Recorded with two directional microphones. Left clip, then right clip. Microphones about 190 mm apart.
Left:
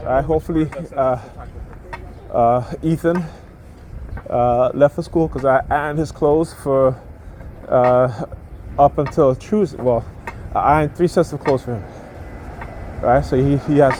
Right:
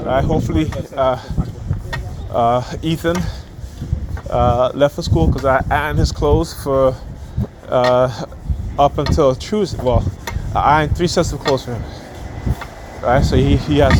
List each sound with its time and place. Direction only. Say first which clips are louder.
0.1 s speech: left 1 dB; 50° left (ahead or behind)
2.3 s speech: even; 50° left (ahead or behind)
13.1 s speech: even; 50° left (ahead or behind)